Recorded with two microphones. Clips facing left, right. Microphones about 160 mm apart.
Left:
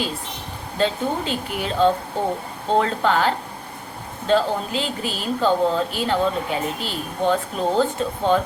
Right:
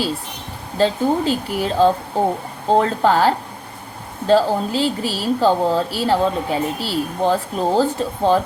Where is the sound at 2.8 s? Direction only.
35° right (ahead or behind).